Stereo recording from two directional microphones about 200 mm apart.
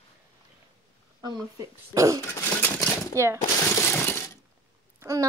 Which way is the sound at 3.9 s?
10° left (ahead or behind).